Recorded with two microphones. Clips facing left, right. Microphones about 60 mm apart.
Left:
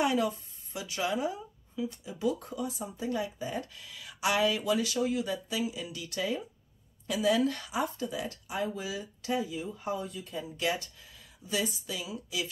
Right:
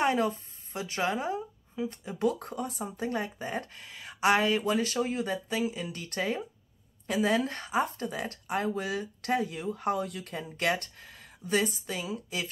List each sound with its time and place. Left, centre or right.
0.0 s a woman's voice: right